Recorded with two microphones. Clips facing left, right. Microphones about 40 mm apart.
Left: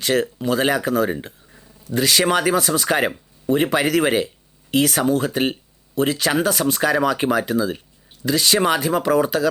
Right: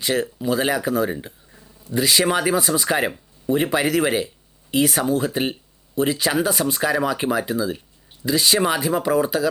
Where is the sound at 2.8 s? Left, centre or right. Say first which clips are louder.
Left 2 dB; centre.